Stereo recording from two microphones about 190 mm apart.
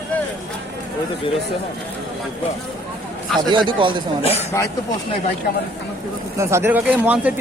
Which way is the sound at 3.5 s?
25° right (ahead or behind).